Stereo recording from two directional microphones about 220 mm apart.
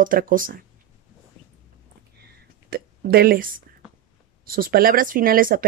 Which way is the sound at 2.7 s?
45° right (ahead or behind).